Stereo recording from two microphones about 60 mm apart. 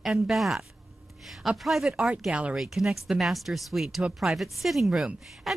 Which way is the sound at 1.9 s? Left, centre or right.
Centre.